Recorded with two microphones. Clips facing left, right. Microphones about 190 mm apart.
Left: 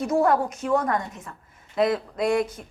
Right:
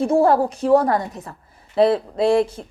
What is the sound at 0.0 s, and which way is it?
Speech, 30° right (ahead or behind).